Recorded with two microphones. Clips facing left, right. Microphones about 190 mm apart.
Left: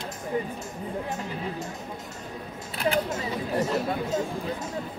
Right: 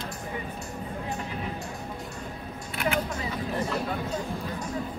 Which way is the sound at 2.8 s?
30° left (ahead or behind).